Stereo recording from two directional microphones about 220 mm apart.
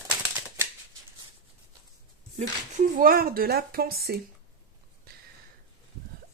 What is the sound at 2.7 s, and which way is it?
Speech, 40° right (ahead or behind).